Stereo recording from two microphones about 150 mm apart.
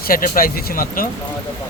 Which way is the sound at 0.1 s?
75° left (ahead or behind).